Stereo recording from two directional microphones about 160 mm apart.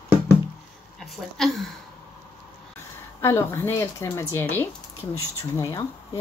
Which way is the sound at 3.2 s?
15° left (ahead or behind).